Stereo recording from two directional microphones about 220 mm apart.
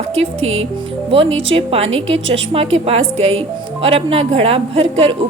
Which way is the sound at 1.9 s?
60° right (ahead or behind).